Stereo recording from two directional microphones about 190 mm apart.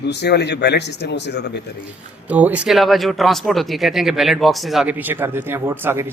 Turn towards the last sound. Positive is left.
turn(degrees=-15)  # may be behind; listen again after turning